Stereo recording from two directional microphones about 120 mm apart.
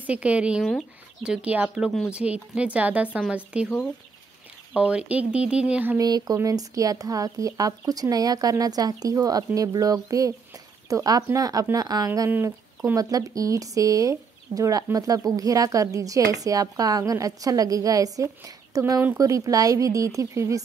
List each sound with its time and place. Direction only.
0.0 s speech: 10° right (ahead or behind)
4.7 s speech: 10° right (ahead or behind)
5.9 s speech: 35° right (ahead or behind)
12.3 s speech: 20° right (ahead or behind)